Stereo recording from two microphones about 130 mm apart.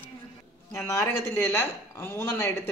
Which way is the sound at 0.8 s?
20° left (ahead or behind).